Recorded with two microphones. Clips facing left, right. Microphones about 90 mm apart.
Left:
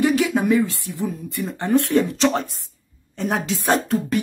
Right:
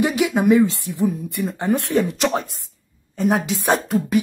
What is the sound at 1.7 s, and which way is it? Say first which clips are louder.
Speech: left 3 dB; 15° right (ahead or behind).